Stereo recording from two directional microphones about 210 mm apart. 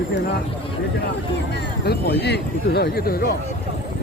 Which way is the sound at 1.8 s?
50° left (ahead or behind).